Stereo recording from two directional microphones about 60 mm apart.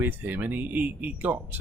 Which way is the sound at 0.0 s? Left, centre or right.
Right.